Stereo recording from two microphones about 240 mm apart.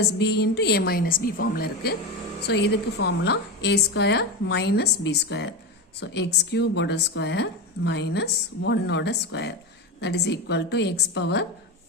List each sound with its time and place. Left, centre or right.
0.0 s a woman's voice: left